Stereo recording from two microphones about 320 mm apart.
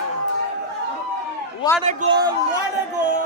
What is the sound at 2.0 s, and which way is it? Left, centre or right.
Speech, right.